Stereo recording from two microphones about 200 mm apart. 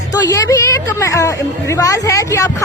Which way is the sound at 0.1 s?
15° left (ahead or behind).